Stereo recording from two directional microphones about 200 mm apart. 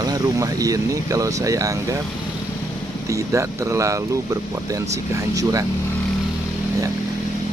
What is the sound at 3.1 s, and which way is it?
Speech, 15° right (ahead or behind).